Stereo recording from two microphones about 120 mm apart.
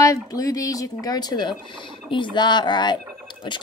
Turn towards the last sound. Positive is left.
turn(degrees=40)  # may be behind; listen again after turning